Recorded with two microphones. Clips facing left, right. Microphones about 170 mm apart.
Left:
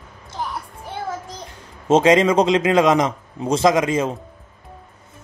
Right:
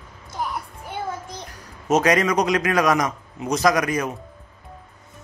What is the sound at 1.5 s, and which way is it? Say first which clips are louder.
A man's voice: left 4 dB; 25° left (ahead or behind).